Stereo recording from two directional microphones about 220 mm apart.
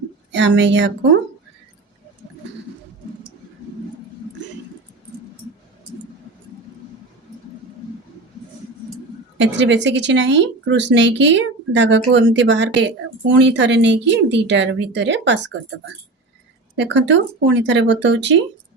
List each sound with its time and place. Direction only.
0.3 s speech: 55° right (ahead or behind)
9.4 s speech: 55° right (ahead or behind)
16.7 s speech: 55° right (ahead or behind)